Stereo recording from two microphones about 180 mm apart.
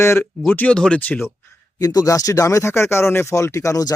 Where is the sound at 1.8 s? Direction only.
20° left (ahead or behind).